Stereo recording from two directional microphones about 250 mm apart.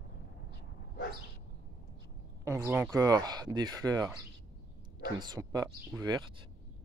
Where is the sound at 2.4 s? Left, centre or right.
Centre.